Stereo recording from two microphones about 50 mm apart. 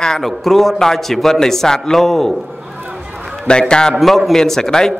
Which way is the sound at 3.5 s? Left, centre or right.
Centre.